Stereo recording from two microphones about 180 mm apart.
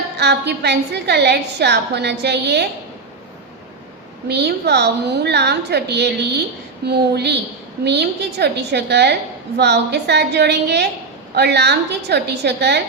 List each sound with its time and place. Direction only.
0.2 s a woman's voice: 70° right (ahead or behind)
4.3 s a woman's voice: 70° right (ahead or behind)